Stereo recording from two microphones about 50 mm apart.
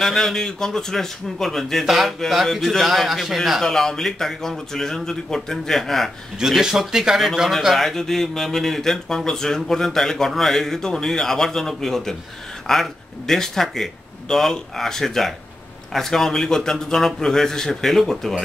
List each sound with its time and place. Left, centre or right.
0.0 s a man's voice: centre
3.6 s speech: centre
6.5 s speech: centre